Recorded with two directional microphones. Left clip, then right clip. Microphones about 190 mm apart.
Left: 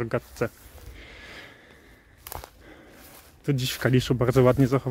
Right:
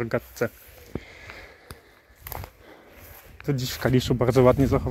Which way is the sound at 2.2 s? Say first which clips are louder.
Right 1 dB; centre (ahead or behind).